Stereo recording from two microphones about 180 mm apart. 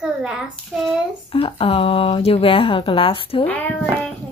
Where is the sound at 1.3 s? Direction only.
30° left (ahead or behind).